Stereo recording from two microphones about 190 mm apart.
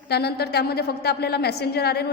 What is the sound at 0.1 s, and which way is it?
A woman's voice, 55° left (ahead or behind).